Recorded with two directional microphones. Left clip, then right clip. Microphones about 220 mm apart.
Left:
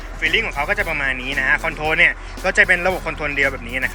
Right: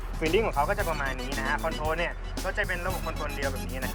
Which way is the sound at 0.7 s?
Centre (ahead or behind).